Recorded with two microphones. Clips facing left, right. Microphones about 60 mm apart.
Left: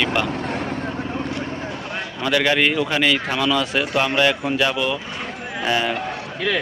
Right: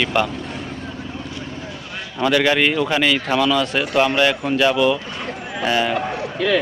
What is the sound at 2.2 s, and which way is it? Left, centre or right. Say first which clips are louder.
A man's voice: right 2 dB; centre.